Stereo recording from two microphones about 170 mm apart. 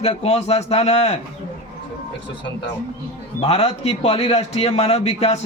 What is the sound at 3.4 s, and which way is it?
A man's voice, 35° left (ahead or behind).